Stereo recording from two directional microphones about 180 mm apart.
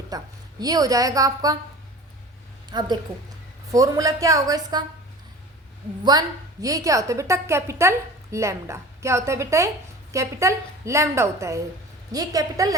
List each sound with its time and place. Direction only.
0.1 s a woman's voice: 20° right (ahead or behind)
2.6 s a woman's voice: 25° right (ahead or behind)
6.1 s a woman's voice: 20° right (ahead or behind)